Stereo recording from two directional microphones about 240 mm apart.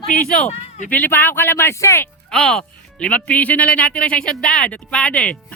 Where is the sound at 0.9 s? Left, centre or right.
Centre.